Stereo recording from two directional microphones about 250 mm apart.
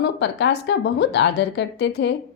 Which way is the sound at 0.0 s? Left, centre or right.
Left.